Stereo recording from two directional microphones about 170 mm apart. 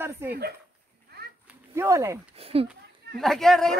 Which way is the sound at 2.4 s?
35° right (ahead or behind).